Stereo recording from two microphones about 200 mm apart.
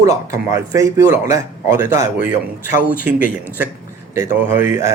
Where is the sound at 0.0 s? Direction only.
15° right (ahead or behind).